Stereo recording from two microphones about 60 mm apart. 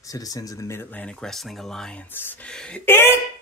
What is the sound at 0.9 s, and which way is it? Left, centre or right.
Speech, left.